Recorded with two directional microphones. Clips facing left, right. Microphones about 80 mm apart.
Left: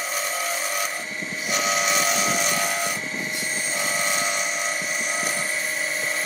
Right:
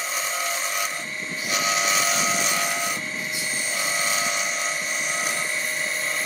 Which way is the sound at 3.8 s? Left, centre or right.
Centre.